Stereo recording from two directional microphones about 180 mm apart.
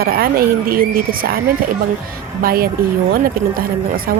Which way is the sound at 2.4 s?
55° right (ahead or behind).